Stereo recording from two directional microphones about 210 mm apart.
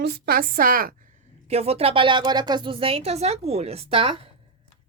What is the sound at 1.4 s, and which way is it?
A woman's voice, 30° right (ahead or behind).